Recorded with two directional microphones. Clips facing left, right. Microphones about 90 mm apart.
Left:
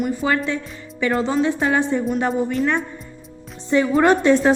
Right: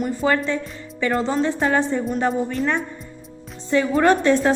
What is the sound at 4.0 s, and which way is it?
Speech, 20° left (ahead or behind).